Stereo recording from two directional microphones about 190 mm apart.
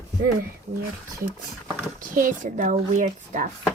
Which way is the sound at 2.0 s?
45° right (ahead or behind).